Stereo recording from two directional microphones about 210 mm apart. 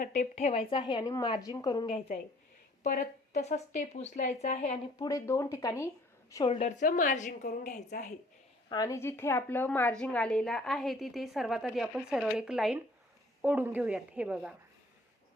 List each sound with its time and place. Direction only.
0.0 s a woman's voice: 35° left (ahead or behind); by 2.0 s 20° left (ahead or behind)
2.8 s speech: 35° left (ahead or behind)
4.9 s speech: 15° left (ahead or behind)
6.3 s speech: 25° left (ahead or behind); by 8.1 s 40° left (ahead or behind)
8.7 s a woman's voice: 15° left (ahead or behind); by 14.5 s 5° right (ahead or behind)